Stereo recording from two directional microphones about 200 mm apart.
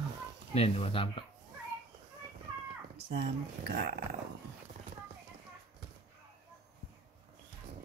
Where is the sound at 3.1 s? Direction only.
55° right (ahead or behind).